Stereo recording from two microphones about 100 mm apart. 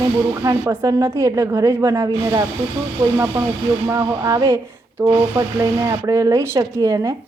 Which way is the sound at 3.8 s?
30° right (ahead or behind).